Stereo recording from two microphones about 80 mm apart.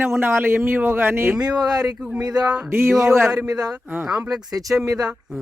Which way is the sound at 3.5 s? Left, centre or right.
Right.